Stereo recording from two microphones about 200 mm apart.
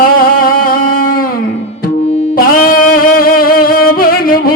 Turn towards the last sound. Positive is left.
turn(degrees=45)  # may be behind; listen again after turning